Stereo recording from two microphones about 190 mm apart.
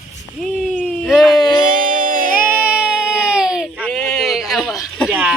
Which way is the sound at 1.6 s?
45° right (ahead or behind).